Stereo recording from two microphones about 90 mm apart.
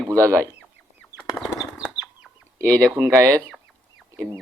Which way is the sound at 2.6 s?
15° left (ahead or behind).